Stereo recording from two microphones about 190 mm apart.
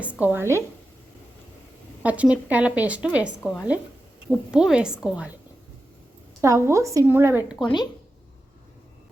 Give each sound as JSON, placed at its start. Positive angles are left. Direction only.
{"t": 0.2, "sound": "a woman's voice", "side_deg": -10}
{"t": 2.0, "sound": "a woman's voice", "side_deg": -5}
{"t": 6.4, "sound": "a woman's voice", "side_deg": -15}
{"t": 7.6, "sound": "speech", "side_deg": 25}